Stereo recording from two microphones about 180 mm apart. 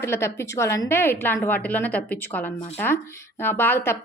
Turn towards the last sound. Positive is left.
turn(degrees=10)  # may be behind; listen again after turning